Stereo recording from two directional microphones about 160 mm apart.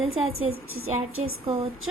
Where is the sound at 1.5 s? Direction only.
35° right (ahead or behind).